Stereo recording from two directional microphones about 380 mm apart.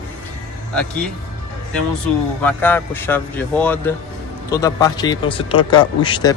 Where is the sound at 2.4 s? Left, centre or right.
Centre.